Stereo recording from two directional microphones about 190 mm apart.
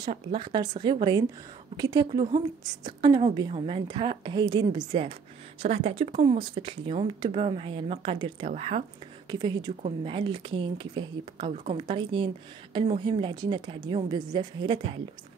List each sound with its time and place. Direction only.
0.0 s a woman's voice: 25° right (ahead or behind)
6.2 s a woman's voice: 25° right (ahead or behind)
9.3 s a woman's voice: 20° right (ahead or behind)